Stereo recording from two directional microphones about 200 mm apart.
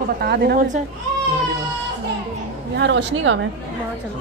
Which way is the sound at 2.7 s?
60° right (ahead or behind).